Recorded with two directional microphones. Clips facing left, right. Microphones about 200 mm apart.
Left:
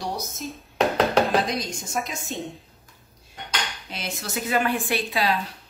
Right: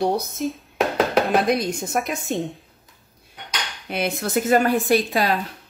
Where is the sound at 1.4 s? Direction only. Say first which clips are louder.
Right 7 dB; 60° right (ahead or behind).